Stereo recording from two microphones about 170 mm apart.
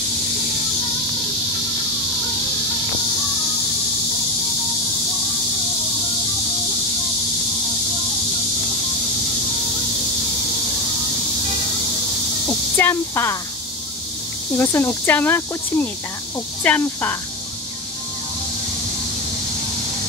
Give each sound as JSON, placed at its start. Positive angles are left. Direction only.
{"t": 12.4, "sound": "speech", "side_deg": 15}
{"t": 14.6, "sound": "speech", "side_deg": 15}